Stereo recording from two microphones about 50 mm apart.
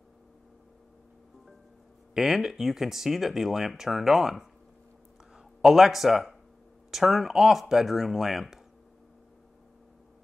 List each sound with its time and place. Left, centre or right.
2.1 s speech: centre